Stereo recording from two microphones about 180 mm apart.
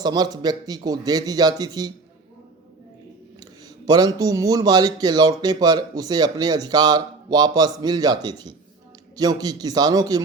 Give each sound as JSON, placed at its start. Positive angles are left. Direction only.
{"t": 0.0, "sound": "speech", "side_deg": -20}
{"t": 3.4, "sound": "speech", "side_deg": -20}